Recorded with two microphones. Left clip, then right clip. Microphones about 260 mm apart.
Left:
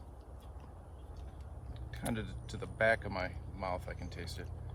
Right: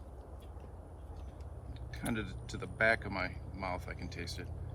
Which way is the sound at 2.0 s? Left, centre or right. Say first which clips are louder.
Right 1 dB; left.